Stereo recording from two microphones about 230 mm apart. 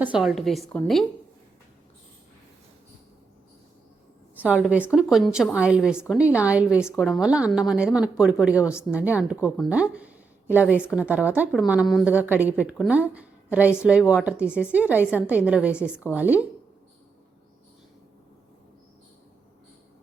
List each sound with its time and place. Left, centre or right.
0.0 s speech: centre
4.4 s speech: centre